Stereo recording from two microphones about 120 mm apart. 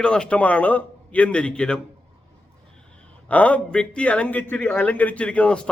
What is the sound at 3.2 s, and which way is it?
A man's voice, 10° left (ahead or behind).